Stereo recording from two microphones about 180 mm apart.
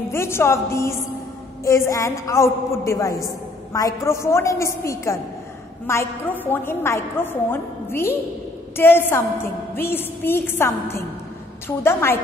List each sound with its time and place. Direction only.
0.1 s a woman's voice: 15° left (ahead or behind)